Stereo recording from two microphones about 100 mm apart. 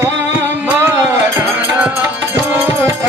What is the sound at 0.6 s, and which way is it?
Music, 20° right (ahead or behind).